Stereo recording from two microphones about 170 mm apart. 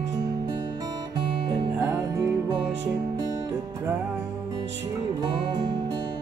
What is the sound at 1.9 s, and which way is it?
Music, 20° right (ahead or behind).